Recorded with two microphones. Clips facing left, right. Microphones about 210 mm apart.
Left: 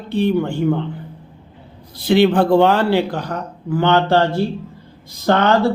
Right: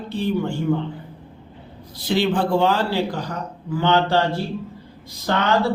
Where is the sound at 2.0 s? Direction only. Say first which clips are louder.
Left 7 dB; 60° left (ahead or behind).